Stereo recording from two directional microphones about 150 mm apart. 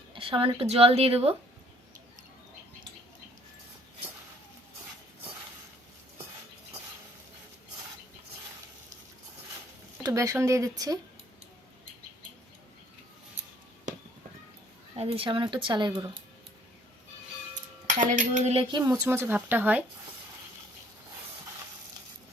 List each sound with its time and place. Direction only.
0.1 s speech: 35° right (ahead or behind)
10.0 s speech: 20° right (ahead or behind)
14.9 s speech: 40° right (ahead or behind)
17.8 s cutlery: 60° right (ahead or behind)
18.8 s speech: 20° right (ahead or behind)